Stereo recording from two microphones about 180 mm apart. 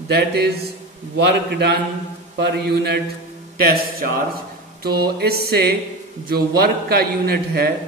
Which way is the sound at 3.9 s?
55° right (ahead or behind).